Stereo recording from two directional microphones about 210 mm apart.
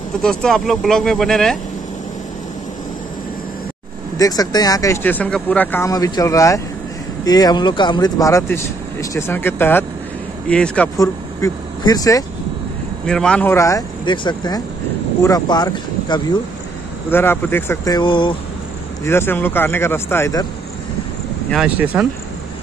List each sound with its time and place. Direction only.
0.2 s speech: 5° left (ahead or behind)
4.2 s speech: 15° left (ahead or behind)
11.0 s speech: 15° left (ahead or behind)
13.0 s speech: 5° left (ahead or behind); by 18.3 s 20° left (ahead or behind)
19.0 s speech: 10° left (ahead or behind)
21.5 s speech: 5° right (ahead or behind)